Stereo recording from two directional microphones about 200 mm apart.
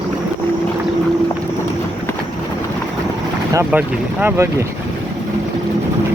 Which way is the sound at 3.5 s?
10° right (ahead or behind).